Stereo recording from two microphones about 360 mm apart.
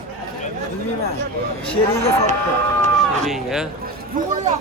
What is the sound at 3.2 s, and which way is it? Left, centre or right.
Speech, centre.